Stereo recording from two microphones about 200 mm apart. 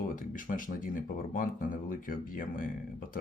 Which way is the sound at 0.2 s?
40° left (ahead or behind).